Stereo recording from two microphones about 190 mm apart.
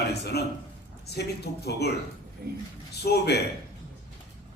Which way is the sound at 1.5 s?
60° left (ahead or behind).